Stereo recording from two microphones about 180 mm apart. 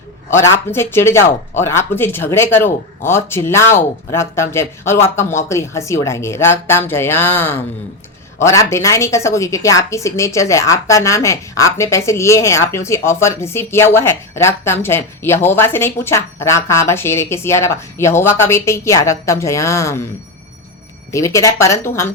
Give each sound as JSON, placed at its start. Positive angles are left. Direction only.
{"t": 0.3, "sound": "a woman's voice", "side_deg": 15}
{"t": 21.1, "sound": "a woman's voice", "side_deg": 15}